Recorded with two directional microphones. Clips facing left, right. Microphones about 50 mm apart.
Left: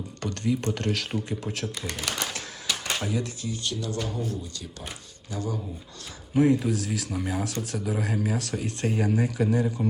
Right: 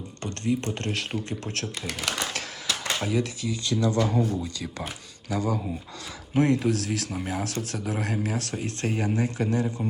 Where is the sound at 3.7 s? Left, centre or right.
Right.